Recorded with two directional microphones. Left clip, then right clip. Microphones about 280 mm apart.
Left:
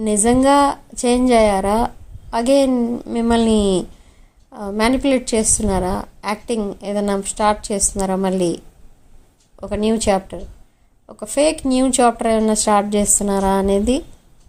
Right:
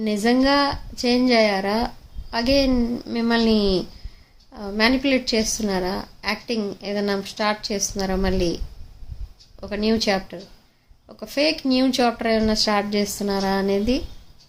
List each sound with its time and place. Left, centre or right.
0.0 s a woman's voice: centre